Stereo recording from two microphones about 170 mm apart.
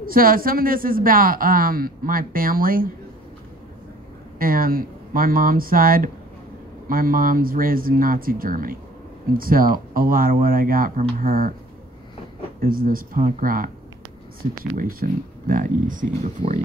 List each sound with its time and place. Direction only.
0.1 s speech: 55° right (ahead or behind)
4.4 s speech: 55° right (ahead or behind)
12.5 s speech: 60° right (ahead or behind)